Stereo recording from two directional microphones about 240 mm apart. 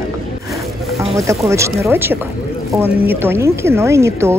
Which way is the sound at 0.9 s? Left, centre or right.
Centre.